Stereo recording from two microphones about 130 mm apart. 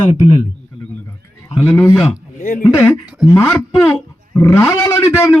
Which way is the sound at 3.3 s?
25° left (ahead or behind).